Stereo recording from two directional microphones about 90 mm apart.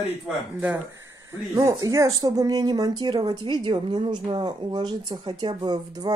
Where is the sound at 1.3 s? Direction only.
35° right (ahead or behind).